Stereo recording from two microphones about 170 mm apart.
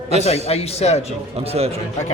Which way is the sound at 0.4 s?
35° left (ahead or behind).